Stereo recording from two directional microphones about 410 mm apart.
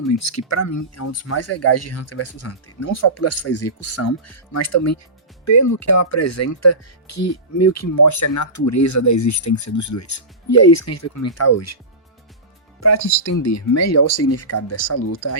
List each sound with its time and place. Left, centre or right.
0.1 s speech: left
12.8 s speech: left